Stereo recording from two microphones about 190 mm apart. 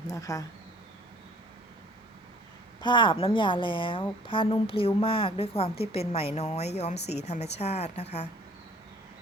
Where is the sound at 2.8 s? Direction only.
25° left (ahead or behind).